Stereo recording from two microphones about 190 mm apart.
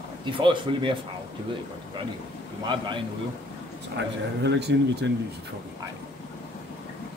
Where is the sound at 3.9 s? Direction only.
65° right (ahead or behind).